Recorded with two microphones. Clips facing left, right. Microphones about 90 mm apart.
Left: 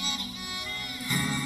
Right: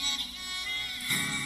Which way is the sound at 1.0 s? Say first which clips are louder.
Left 6 dB; 15° left (ahead or behind).